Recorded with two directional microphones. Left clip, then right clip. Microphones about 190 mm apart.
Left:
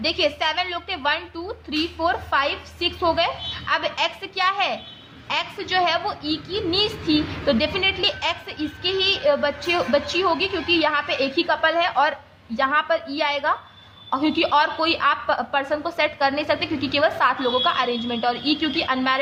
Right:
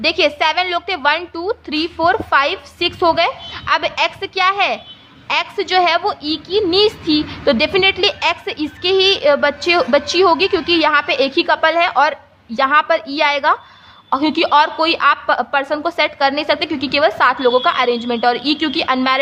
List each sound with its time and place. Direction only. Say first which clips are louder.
0.0 s a woman's voice: right 7 dB; 40° right (ahead or behind)